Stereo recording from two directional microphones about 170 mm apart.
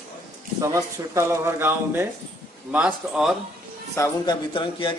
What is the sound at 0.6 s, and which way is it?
Speech, 20° right (ahead or behind).